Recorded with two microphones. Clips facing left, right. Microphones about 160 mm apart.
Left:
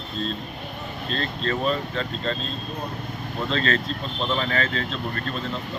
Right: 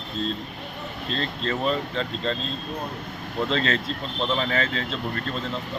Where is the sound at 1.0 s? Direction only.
20° right (ahead or behind).